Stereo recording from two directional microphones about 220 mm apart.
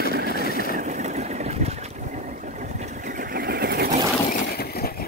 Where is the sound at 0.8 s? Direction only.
35° right (ahead or behind).